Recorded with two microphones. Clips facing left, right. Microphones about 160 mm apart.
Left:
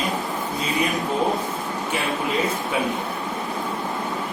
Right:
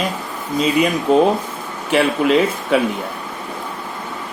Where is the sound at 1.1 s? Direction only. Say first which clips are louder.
Right 8 dB; 85° right.